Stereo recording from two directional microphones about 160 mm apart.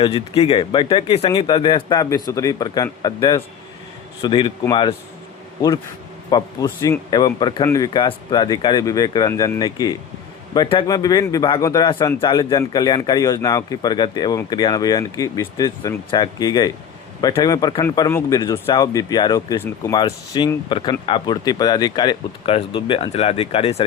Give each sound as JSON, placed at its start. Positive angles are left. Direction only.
{"t": 0.0, "sound": "speech", "side_deg": 40}
{"t": 6.3, "sound": "speech", "side_deg": 20}
{"t": 20.0, "sound": "speech", "side_deg": 30}